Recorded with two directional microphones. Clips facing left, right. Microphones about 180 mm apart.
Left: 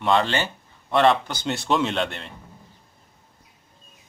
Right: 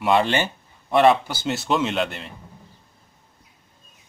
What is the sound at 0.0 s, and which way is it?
Speech, 15° right (ahead or behind).